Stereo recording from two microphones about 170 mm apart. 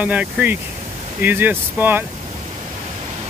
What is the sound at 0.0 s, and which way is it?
Speech, 10° right (ahead or behind).